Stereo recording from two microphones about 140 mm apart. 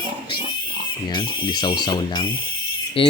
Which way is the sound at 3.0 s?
40° left (ahead or behind).